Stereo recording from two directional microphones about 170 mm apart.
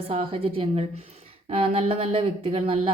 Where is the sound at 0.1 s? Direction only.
35° right (ahead or behind).